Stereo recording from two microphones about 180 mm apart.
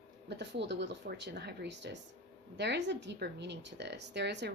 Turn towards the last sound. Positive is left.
turn(degrees=-70)  # may be behind; listen again after turning